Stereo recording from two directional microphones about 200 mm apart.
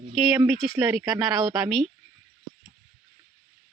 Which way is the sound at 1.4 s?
20° right (ahead or behind).